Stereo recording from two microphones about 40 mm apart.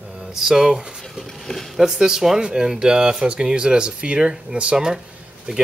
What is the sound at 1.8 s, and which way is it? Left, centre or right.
Speech, centre.